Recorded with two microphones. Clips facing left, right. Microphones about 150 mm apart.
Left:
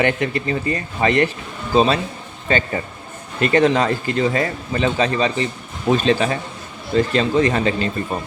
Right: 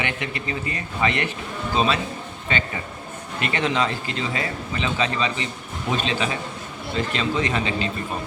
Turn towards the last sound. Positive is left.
turn(degrees=45)  # may be behind; listen again after turning